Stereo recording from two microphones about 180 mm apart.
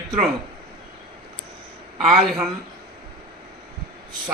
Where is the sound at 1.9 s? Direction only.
Centre (ahead or behind).